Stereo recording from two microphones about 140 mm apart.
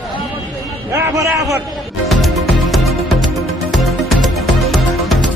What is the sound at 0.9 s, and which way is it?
Speech, 20° right (ahead or behind).